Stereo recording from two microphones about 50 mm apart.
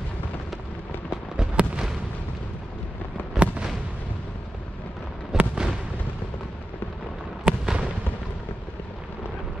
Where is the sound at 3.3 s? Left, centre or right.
Centre.